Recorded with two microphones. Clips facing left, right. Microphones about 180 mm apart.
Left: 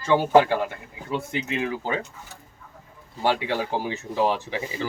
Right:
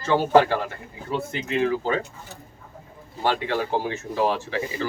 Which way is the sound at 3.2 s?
15° left (ahead or behind).